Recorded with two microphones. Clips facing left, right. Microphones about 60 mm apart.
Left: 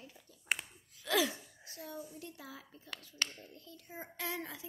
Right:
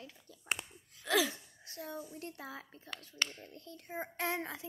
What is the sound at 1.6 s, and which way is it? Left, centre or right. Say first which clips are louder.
A child's voice: right 3 dB; right.